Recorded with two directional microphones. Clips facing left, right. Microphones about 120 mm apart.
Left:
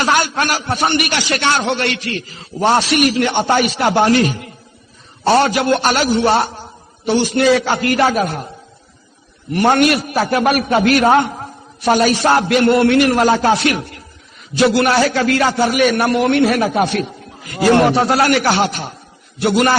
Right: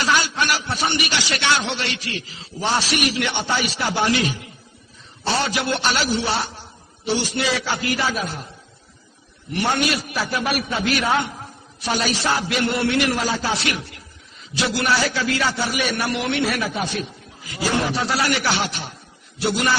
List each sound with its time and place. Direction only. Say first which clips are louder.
0.0 s a man's voice: left 5 dB; 50° left (ahead or behind)
9.5 s a man's voice: left 9 dB; 50° left (ahead or behind)